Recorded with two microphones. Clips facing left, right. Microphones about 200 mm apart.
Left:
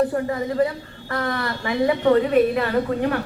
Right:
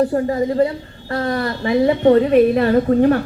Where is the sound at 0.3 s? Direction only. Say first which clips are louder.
Right 5 dB; 30° right (ahead or behind).